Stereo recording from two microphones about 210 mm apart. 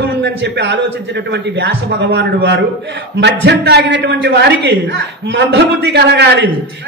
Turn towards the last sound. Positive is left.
turn(degrees=-55)  # may be behind; listen again after turning